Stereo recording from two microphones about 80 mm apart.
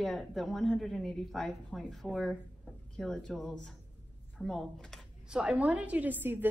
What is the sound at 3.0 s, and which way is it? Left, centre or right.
A woman's voice, centre.